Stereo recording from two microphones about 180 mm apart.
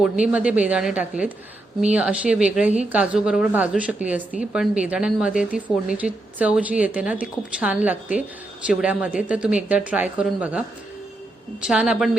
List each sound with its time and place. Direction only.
0.0 s a woman's voice: 5° right (ahead or behind)
11.6 s a woman's voice: 5° right (ahead or behind)